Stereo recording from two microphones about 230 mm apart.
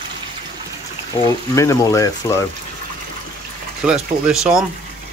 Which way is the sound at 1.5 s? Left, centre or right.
Centre.